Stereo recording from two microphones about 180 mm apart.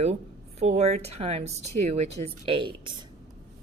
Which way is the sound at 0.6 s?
40° right (ahead or behind).